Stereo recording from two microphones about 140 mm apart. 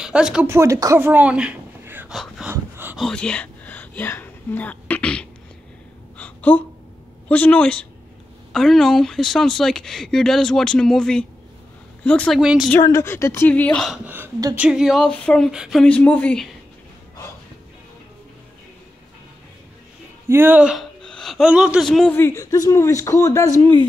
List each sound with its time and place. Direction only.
0.0 s speech: 5° right (ahead or behind)
0.5 s speech: 20° right (ahead or behind)
2.1 s a sound: centre (ahead or behind)
2.5 s dog: 15° right (ahead or behind)
3.0 s a sound: 5° left (ahead or behind)
6.1 s gasp: 10° left (ahead or behind)
7.2 s speech: 10° left (ahead or behind)
12.4 s speech: 5° right (ahead or behind)
12.8 s speech: 20° left (ahead or behind)
14.0 s speech: 15° right (ahead or behind); by 16.4 s 10° left (ahead or behind)
20.2 s speech: 15° right (ahead or behind)
20.7 s a woman's voice: 5° left (ahead or behind)
22.1 s speech: 20° left (ahead or behind)
23.6 s speech: 35° right (ahead or behind)